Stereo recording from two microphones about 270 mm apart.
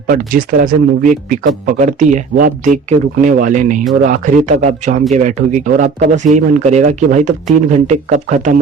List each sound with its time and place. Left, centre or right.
0.1 s a man's voice: right